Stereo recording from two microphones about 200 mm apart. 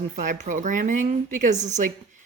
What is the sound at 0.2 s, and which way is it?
Speech, 40° right (ahead or behind).